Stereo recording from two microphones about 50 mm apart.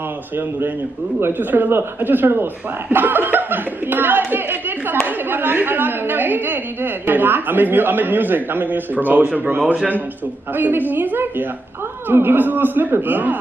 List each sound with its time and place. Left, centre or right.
1.2 s speech: right
10.5 s a woman's voice: right